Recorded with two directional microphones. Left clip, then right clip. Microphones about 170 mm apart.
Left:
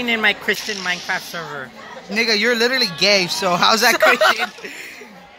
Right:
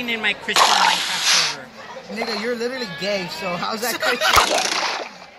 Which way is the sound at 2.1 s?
20° left (ahead or behind).